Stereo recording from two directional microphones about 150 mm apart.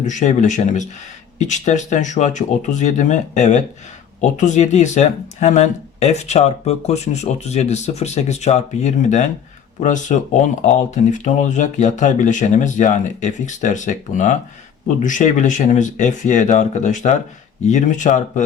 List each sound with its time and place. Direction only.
0.0 s speech: 55° left (ahead or behind)